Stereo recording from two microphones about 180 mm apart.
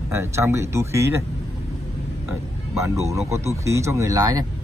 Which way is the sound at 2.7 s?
15° right (ahead or behind).